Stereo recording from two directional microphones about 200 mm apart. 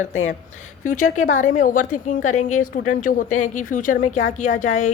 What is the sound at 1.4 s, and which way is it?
A woman's voice, 40° left (ahead or behind).